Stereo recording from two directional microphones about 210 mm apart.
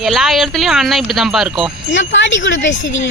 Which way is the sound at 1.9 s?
60° left (ahead or behind).